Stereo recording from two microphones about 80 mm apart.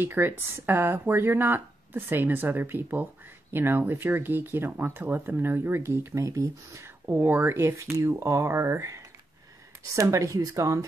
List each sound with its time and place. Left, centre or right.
0.0 s speech: right
7.1 s speech: right